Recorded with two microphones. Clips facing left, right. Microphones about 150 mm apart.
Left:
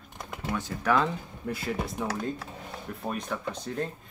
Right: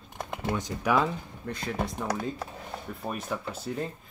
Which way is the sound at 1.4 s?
5° left (ahead or behind).